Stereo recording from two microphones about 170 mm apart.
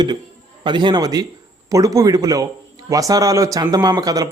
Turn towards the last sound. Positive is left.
turn(degrees=-20)  # may be behind; listen again after turning